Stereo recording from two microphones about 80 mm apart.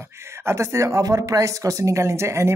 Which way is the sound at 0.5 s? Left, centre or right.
Right.